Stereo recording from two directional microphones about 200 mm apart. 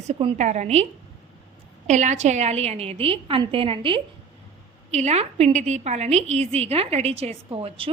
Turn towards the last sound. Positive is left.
turn(degrees=-25)  # may be behind; listen again after turning